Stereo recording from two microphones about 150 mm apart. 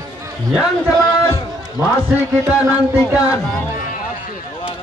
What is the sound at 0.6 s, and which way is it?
Speech, 25° left (ahead or behind).